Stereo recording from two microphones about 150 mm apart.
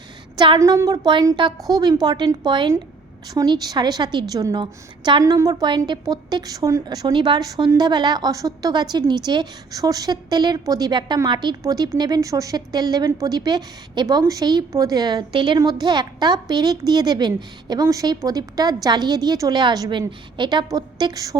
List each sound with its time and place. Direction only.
0.3 s a woman's voice: 30° right (ahead or behind)